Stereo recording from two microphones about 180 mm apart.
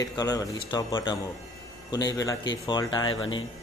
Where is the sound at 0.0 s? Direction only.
20° left (ahead or behind).